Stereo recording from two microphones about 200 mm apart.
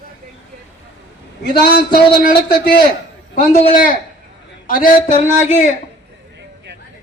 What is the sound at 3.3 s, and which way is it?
A man's voice, 45° left (ahead or behind).